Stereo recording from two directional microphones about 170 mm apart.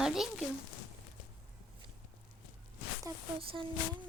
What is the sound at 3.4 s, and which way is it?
Speech, 35° right (ahead or behind).